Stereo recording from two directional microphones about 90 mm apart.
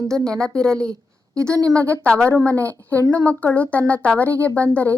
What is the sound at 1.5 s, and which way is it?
Speech, 40° right (ahead or behind).